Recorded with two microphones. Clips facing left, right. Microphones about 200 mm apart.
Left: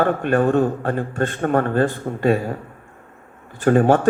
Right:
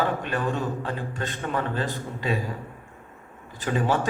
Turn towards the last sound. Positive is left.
turn(degrees=50)  # may be behind; listen again after turning